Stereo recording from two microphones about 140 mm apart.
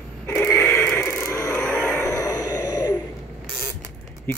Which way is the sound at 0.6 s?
15° left (ahead or behind).